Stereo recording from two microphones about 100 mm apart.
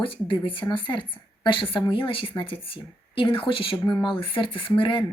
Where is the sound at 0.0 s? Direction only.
60° left (ahead or behind).